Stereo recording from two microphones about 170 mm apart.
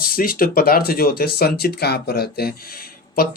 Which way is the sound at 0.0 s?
55° left (ahead or behind).